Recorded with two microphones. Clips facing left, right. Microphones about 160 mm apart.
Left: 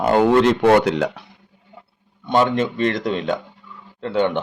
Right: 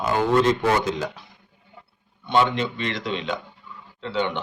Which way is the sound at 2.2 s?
45° left (ahead or behind).